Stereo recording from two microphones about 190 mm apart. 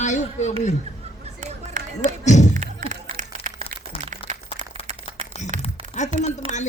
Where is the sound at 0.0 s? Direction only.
40° left (ahead or behind).